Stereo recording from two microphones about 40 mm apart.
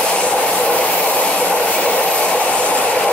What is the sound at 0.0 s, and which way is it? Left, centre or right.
Train, left.